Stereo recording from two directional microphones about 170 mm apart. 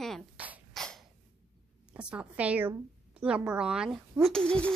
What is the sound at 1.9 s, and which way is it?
A woman's voice, 5° right (ahead or behind).